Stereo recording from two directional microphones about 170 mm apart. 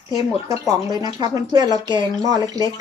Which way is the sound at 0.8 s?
25° right (ahead or behind).